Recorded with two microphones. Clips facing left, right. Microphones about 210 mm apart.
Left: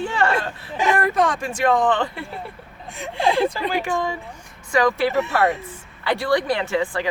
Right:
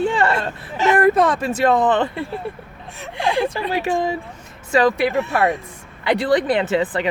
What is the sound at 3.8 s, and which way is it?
Speech, 25° right (ahead or behind).